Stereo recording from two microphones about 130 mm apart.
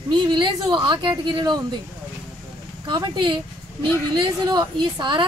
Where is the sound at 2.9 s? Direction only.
35° right (ahead or behind).